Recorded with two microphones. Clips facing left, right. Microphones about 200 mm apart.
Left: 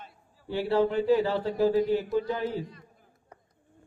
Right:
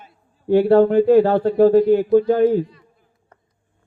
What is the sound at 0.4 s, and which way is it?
A man's voice, 55° right (ahead or behind).